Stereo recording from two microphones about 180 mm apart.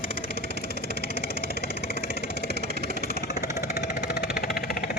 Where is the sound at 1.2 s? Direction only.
60° left (ahead or behind).